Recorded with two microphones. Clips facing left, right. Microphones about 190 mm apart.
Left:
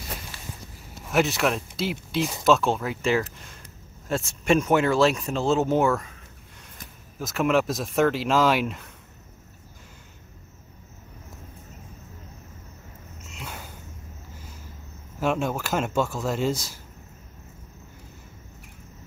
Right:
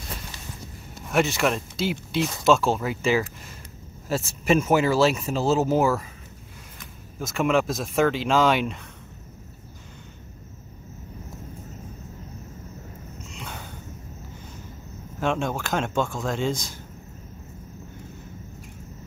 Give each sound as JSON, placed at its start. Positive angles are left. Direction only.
{"t": 1.1, "sound": "speech", "side_deg": 0}
{"t": 7.2, "sound": "speech", "side_deg": 0}
{"t": 13.3, "sound": "a sound", "side_deg": 5}
{"t": 15.1, "sound": "speech", "side_deg": 5}